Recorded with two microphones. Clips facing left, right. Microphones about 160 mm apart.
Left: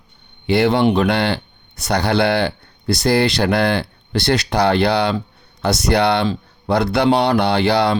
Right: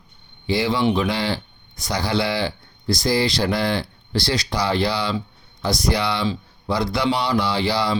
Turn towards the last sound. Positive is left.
turn(degrees=65)  # may be behind; listen again after turning